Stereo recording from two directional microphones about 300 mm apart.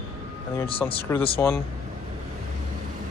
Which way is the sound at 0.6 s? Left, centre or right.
Centre.